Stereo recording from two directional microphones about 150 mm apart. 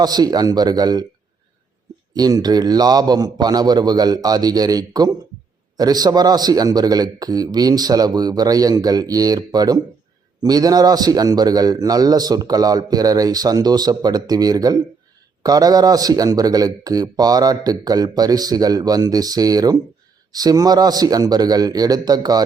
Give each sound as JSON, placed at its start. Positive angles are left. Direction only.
{"t": 0.0, "sound": "a man's voice", "side_deg": -25}
{"t": 2.1, "sound": "a man's voice", "side_deg": -25}